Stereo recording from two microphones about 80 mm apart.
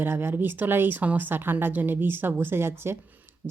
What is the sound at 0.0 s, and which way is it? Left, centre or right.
Speech, right.